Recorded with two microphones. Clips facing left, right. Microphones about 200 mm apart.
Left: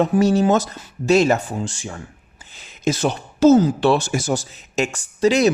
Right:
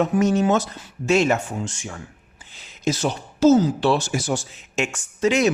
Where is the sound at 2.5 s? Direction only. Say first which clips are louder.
Left 2 dB; 55° left (ahead or behind); by 5.5 s 35° left (ahead or behind).